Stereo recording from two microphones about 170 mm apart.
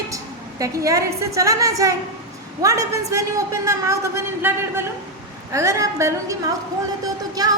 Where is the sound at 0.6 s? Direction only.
20° right (ahead or behind).